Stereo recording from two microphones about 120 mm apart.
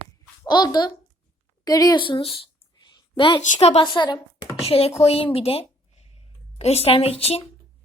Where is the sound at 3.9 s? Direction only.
35° left (ahead or behind).